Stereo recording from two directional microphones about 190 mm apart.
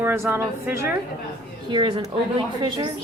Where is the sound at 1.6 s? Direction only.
25° right (ahead or behind).